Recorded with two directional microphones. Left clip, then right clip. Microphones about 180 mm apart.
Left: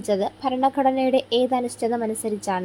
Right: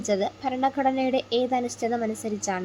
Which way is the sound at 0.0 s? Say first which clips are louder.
Left 3 dB; 15° left (ahead or behind).